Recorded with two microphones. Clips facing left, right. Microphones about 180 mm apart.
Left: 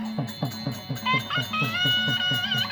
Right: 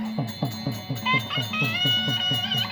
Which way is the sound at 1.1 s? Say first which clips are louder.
Even; 20° right (ahead or behind).